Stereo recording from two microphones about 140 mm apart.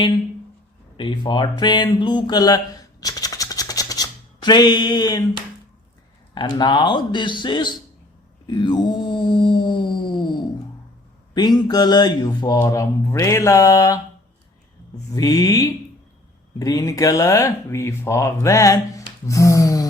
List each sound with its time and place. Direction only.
0.9 s speech: 35° left (ahead or behind)
3.0 s a sound: 25° left (ahead or behind)
6.3 s speech: 30° left (ahead or behind)
8.4 s mantra: 30° left (ahead or behind)
11.3 s speech: 30° left (ahead or behind)
15.1 s speech: 25° left (ahead or behind)